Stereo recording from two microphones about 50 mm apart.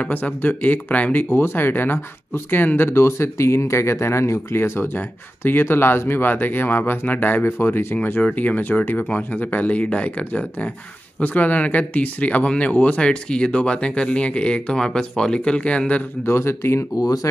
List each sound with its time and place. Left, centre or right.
0.0 s speech: left
1.3 s speech: left
4.6 s speech: left
7.4 s speech: left
8.2 s speech: left
16.3 s speech: left